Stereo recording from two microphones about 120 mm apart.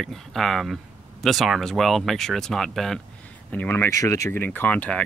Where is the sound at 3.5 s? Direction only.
15° left (ahead or behind).